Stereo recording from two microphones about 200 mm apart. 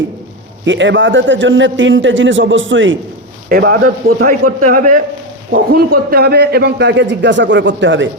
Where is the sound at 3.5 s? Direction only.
45° right (ahead or behind); by 8.1 s 65° right (ahead or behind).